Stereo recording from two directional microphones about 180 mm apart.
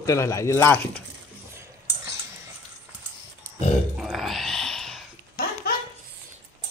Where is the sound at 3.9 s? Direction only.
Centre (ahead or behind).